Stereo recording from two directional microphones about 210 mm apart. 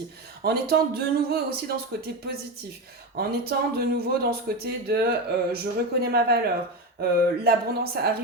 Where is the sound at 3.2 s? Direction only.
45° right (ahead or behind).